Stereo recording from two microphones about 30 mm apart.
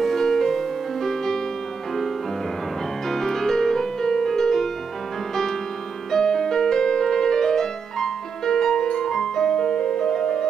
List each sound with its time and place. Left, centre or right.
0.0 s music: centre
3.1 s music: centre
6.1 s music: centre